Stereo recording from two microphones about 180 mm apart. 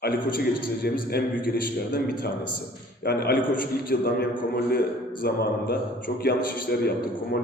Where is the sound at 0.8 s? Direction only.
55° left (ahead or behind).